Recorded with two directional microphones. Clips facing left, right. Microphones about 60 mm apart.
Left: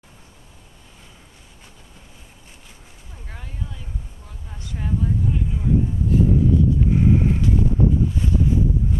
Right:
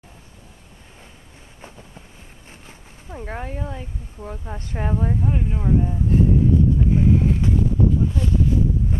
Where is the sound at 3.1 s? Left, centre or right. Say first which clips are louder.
Right 11 dB; right.